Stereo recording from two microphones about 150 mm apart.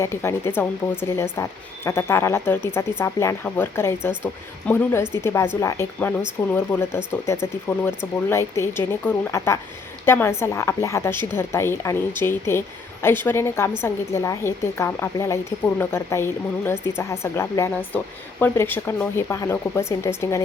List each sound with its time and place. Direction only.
0.0 s speech: 15° left (ahead or behind)